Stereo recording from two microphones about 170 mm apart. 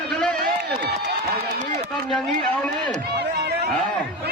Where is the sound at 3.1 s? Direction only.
75° right (ahead or behind).